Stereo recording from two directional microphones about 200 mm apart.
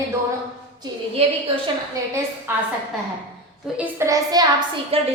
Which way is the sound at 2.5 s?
10° right (ahead or behind).